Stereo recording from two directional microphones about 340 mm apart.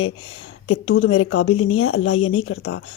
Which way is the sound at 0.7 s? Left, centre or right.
Left.